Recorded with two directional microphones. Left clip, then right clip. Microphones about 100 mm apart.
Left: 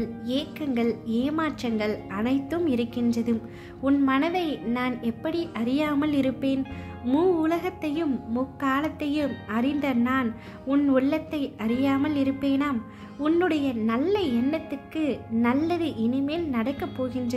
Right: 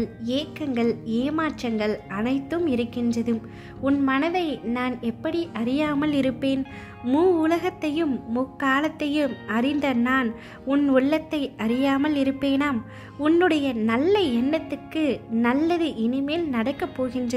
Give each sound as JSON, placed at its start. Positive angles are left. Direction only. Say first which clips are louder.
{"t": 0.0, "sound": "a woman's voice", "louder": "right 2 dB", "side_deg": -35}